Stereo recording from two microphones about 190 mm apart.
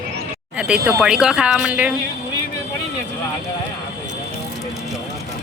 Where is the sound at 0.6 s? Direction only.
5° right (ahead or behind).